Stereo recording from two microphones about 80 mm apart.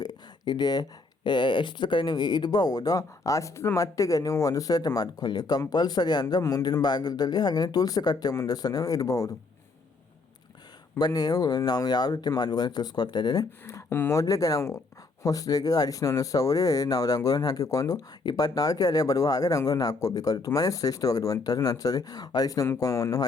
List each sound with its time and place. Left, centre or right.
0.0 s speech: left
10.9 s speech: left
18.2 s speech: left